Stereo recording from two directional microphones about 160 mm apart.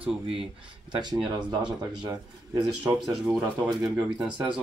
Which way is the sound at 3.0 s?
5° right (ahead or behind).